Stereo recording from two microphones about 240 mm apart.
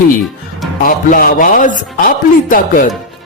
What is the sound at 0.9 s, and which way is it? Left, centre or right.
Speech, left.